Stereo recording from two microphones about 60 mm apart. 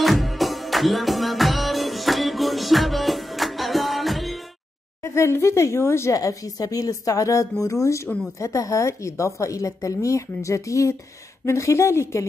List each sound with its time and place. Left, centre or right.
0.0 s music: centre
5.0 s a woman's voice: left
6.1 s a woman's voice: left
7.8 s a woman's voice: left